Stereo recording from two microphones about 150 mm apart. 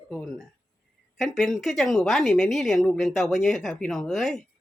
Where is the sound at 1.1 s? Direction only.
Centre (ahead or behind).